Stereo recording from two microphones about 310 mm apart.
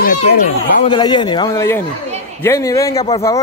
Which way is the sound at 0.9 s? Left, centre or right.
Centre.